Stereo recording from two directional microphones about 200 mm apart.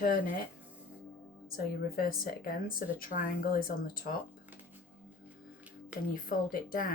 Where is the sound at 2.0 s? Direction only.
45° left (ahead or behind).